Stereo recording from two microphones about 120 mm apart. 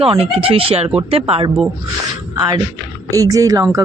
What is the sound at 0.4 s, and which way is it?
Speech, 50° right (ahead or behind).